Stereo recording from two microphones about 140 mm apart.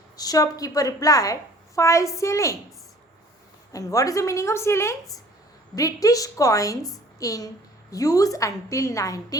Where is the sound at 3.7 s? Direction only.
25° left (ahead or behind).